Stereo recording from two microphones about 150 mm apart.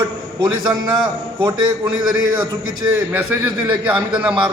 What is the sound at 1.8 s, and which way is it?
A man's voice, 10° right (ahead or behind).